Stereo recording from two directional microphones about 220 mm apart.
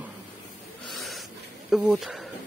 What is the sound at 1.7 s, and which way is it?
Speech, centre (ahead or behind).